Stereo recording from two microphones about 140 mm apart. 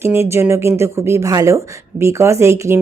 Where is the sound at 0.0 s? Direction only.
20° right (ahead or behind).